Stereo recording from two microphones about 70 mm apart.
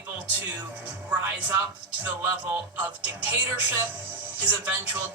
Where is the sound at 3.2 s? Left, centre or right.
Right.